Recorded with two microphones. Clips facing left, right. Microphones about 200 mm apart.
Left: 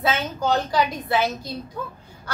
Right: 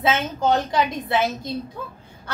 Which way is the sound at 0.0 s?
25° right (ahead or behind).